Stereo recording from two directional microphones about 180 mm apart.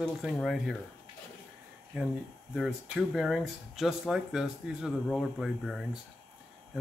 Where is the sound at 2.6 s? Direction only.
5° right (ahead or behind).